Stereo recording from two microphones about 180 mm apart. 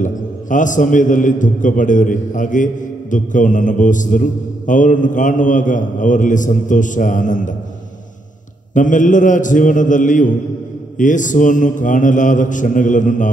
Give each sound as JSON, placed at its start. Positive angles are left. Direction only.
{"t": 0.0, "sound": "a man's voice", "side_deg": 45}
{"t": 8.7, "sound": "a man's voice", "side_deg": 45}